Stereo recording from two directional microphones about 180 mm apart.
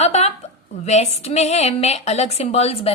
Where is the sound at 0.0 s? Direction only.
35° left (ahead or behind).